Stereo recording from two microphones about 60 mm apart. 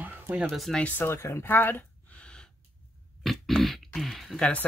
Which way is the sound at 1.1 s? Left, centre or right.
Left.